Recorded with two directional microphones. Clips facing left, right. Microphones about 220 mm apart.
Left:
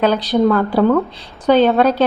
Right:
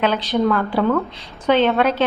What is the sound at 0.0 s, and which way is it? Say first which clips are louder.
A woman's voice: left 4 dB; 40° left (ahead or behind).